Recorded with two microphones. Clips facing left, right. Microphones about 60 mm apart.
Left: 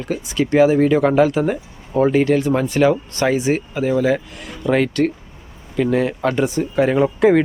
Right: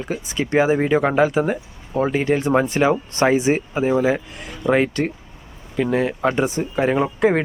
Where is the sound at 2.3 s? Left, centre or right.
Centre.